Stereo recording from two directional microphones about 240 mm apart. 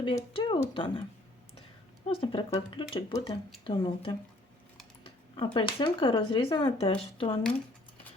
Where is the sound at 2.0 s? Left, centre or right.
Left.